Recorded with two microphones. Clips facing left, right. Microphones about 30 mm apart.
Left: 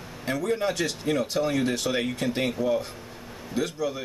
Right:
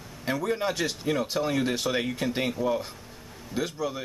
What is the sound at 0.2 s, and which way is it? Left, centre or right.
Speech, centre.